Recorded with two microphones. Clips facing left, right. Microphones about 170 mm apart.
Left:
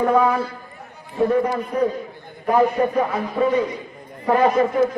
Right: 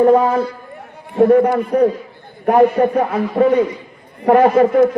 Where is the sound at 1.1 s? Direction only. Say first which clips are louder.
Right 8 dB; 60° right (ahead or behind).